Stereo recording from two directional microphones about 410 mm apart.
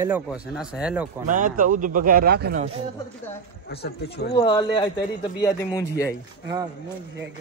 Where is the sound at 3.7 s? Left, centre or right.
Left.